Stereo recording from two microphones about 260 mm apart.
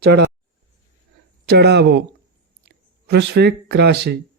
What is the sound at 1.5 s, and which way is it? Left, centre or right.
Speech, right.